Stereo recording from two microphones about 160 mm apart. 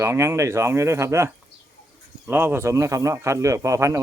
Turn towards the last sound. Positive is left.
turn(degrees=-20)  # may be behind; listen again after turning